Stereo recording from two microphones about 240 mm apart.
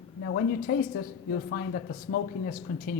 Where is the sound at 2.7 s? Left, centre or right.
Left.